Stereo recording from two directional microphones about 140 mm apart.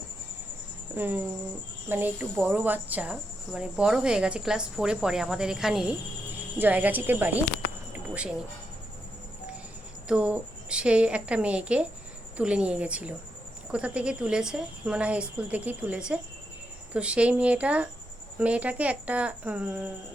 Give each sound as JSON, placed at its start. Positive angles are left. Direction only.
{"t": 0.9, "sound": "a woman's voice", "side_deg": -15}
{"t": 10.1, "sound": "speech", "side_deg": -10}